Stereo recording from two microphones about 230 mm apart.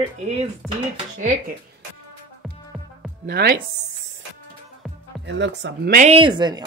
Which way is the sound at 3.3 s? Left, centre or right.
Right.